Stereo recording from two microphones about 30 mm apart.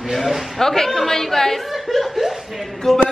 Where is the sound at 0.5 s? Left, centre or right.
Centre.